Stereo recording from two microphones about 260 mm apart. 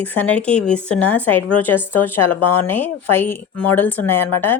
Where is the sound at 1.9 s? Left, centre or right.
Left.